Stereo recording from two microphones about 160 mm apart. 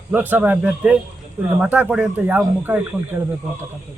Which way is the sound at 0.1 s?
10° right (ahead or behind).